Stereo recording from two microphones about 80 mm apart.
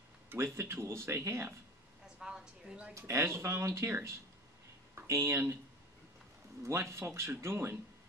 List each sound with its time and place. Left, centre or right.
0.3 s speech: right
2.1 s a sound: centre
2.9 s speech: right
6.6 s speech: right